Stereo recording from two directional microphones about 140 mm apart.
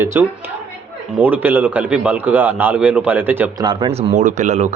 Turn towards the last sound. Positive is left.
turn(degrees=-60)  # may be behind; listen again after turning